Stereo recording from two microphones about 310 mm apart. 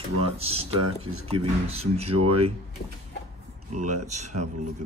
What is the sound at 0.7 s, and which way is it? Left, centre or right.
Speech, right.